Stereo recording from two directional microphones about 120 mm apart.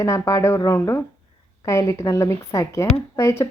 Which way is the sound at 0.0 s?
25° left (ahead or behind).